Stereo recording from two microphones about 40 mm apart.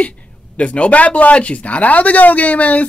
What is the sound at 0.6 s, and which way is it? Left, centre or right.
Speech, left.